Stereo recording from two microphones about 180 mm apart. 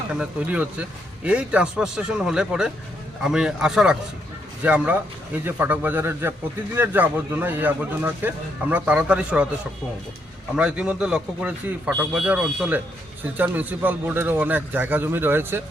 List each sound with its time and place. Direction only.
0.1 s a man's voice: 5° right (ahead or behind)
10.5 s a man's voice: 5° right (ahead or behind)